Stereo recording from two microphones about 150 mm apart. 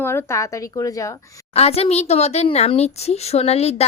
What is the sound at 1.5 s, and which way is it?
A woman's voice, 45° left (ahead or behind).